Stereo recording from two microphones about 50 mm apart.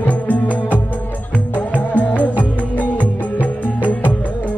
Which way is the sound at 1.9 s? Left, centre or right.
Left.